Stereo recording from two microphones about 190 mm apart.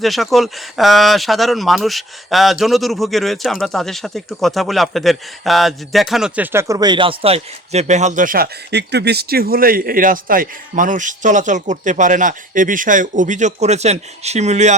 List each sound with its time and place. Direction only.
0.0 s speech: centre (ahead or behind); by 14.8 s 35° right (ahead or behind)